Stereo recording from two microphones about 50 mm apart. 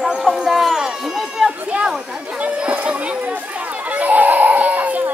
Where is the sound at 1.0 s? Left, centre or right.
Centre.